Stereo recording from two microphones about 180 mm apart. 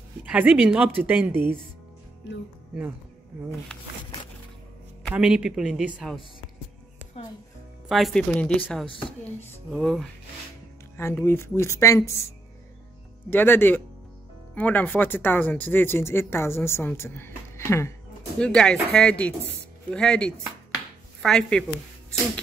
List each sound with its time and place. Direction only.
0.2 s a woman's voice: 10° right (ahead or behind)
5.1 s a man's voice: 5° right (ahead or behind)
7.9 s a man's voice: centre (ahead or behind)
11.0 s speech: 15° left (ahead or behind)
13.3 s speech: 10° left (ahead or behind)
18.4 s a man's voice: 5° left (ahead or behind)